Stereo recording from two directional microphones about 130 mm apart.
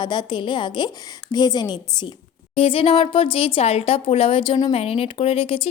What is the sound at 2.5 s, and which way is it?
Speech, 45° left (ahead or behind).